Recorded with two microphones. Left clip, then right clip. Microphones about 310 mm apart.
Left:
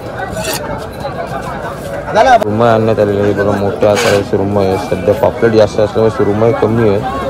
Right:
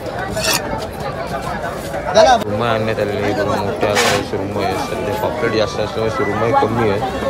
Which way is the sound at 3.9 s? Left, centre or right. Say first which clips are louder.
Left 2 dB; right.